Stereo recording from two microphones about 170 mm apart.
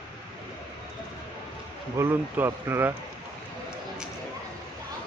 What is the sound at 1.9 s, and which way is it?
Speech, 15° right (ahead or behind).